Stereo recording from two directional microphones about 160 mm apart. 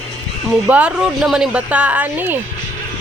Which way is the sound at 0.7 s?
10° right (ahead or behind).